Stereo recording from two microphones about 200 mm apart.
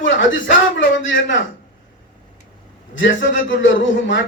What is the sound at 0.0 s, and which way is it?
A man's voice, 70° left (ahead or behind).